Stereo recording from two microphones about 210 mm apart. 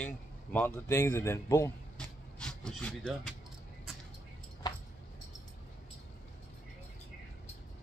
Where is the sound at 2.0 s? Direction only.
5° left (ahead or behind).